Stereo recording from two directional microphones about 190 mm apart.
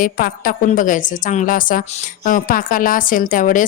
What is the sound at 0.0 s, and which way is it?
A woman's voice, 50° left (ahead or behind).